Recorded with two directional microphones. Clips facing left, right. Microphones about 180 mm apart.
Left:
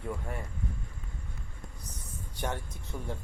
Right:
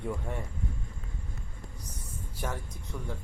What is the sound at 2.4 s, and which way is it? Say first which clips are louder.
Speech: left 1 dB; centre (ahead or behind).